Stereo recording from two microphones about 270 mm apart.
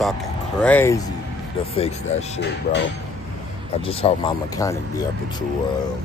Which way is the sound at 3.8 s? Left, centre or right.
Centre.